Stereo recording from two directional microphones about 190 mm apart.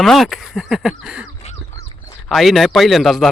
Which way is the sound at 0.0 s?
Centre (ahead or behind).